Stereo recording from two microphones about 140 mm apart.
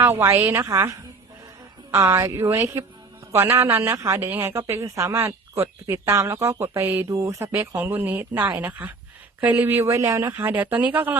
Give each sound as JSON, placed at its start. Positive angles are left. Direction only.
{"t": 0.0, "sound": "a woman's voice", "side_deg": -15}